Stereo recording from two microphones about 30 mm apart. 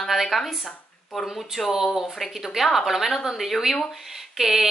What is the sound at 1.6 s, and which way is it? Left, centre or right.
Speech, centre.